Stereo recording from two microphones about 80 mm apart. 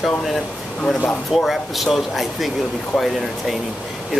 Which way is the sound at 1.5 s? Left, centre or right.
Centre.